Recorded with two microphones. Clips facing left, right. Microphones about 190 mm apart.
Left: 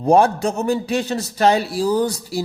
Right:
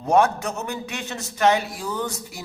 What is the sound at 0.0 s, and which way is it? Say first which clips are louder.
A man's voice: left 5 dB; 30° left (ahead or behind).